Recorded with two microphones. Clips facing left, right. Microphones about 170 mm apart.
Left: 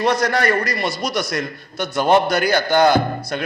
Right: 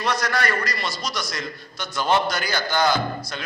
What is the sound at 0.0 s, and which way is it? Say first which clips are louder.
A man's voice: left 6 dB; 60° left (ahead or behind).